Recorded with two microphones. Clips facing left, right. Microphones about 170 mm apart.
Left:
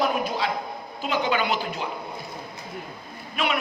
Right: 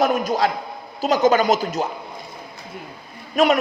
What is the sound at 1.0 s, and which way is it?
Speech, 40° right (ahead or behind).